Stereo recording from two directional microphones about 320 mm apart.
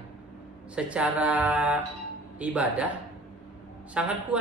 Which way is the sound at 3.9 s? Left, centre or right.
Centre.